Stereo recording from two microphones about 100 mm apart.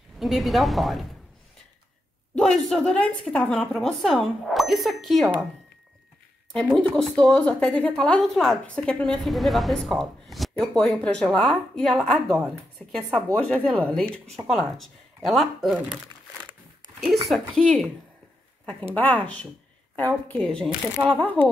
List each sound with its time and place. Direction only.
0.2 s a woman's voice: centre (ahead or behind)
2.3 s a woman's voice: 5° left (ahead or behind)
6.5 s a woman's voice: 10° left (ahead or behind)
17.3 s a woman's voice: 5° left (ahead or behind)
18.9 s a woman's voice: 15° left (ahead or behind)